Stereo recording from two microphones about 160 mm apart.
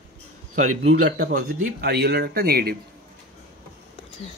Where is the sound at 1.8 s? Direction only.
80° right.